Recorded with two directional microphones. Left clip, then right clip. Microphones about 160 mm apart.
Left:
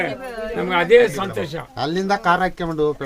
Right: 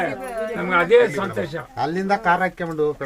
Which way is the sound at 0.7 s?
90° left.